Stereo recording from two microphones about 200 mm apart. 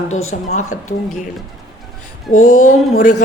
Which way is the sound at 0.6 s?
90° left.